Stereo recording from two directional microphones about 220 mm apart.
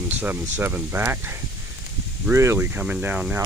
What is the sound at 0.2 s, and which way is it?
Speech, 10° right (ahead or behind).